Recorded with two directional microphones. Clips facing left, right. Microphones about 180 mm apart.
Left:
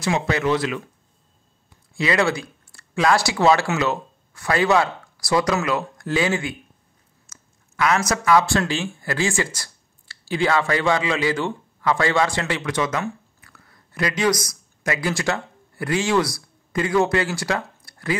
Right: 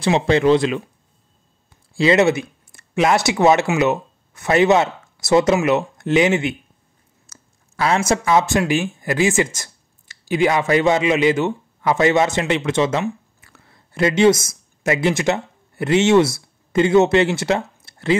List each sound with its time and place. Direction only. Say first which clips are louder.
0.0 s speech: right 6 dB; 25° right (ahead or behind)
2.0 s speech: right 6 dB; 25° right (ahead or behind)
7.2 s speech: right 4 dB; 30° right (ahead or behind)